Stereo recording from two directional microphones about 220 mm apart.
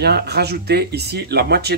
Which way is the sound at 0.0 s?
50° right (ahead or behind).